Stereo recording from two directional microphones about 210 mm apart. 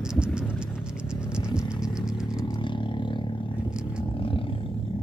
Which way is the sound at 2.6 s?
25° left (ahead or behind).